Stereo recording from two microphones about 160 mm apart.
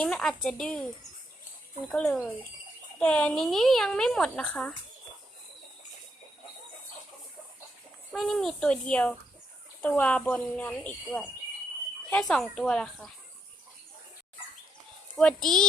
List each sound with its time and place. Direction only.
0.0 s a woman's voice: 5° left (ahead or behind)
1.9 s a woman's voice: 5° left (ahead or behind)
8.1 s a woman's voice: centre (ahead or behind)
15.1 s a woman's voice: 5° left (ahead or behind)